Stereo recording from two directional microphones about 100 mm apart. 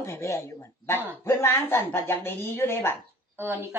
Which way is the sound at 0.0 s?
30° left (ahead or behind).